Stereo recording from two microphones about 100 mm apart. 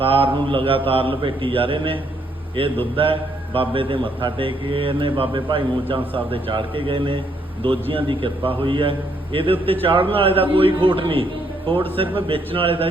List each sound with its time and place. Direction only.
0.0 s a man's voice: 65° right (ahead or behind)